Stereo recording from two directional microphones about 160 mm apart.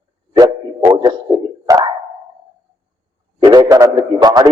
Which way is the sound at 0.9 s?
25° right (ahead or behind).